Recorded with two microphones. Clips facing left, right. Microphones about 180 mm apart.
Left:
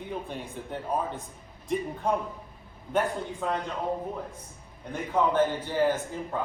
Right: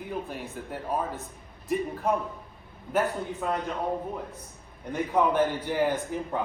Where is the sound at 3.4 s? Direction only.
10° right (ahead or behind).